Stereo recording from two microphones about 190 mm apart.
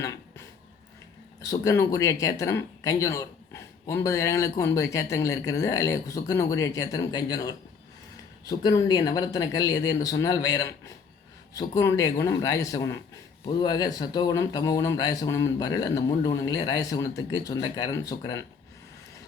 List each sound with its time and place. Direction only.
0.0 s dog: 15° left (ahead or behind)
1.4 s speech: 20° left (ahead or behind)